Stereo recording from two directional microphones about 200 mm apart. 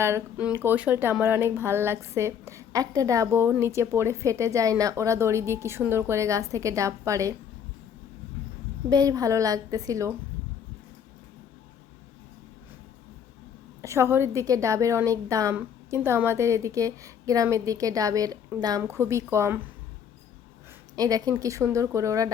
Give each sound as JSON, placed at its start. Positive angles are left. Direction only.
{"t": 0.0, "sound": "speech", "side_deg": -10}
{"t": 8.9, "sound": "speech", "side_deg": -20}
{"t": 13.8, "sound": "speech", "side_deg": -15}
{"t": 20.9, "sound": "speech", "side_deg": -20}